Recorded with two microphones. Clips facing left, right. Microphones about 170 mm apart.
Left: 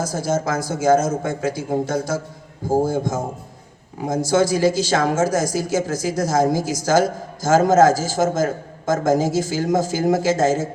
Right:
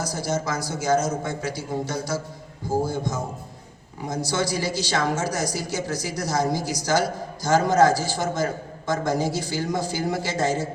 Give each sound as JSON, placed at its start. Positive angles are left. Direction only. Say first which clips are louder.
{"t": 0.0, "sound": "speech", "louder": "left 5 dB", "side_deg": 50}